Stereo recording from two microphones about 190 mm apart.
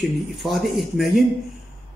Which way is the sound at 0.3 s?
Centre (ahead or behind).